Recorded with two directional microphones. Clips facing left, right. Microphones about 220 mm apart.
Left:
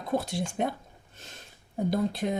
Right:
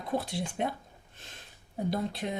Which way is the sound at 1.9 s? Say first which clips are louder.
Left 5 dB; 45° left (ahead or behind).